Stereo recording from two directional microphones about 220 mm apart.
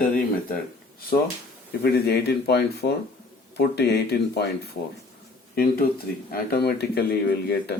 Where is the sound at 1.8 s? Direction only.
45° left (ahead or behind).